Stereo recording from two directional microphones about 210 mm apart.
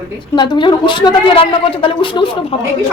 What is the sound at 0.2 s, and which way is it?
A woman's voice, 20° left (ahead or behind).